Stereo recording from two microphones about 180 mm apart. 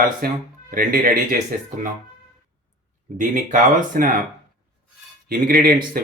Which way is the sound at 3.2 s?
50° right (ahead or behind).